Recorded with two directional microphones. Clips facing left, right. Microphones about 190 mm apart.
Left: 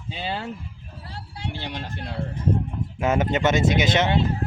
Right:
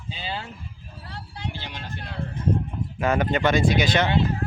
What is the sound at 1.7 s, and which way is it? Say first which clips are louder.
Speech: left 4 dB; 35° left (ahead or behind).